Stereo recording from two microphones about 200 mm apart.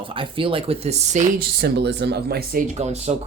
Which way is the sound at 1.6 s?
55° right (ahead or behind).